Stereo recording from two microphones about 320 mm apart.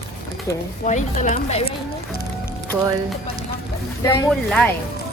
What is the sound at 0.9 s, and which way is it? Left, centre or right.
Speech, left.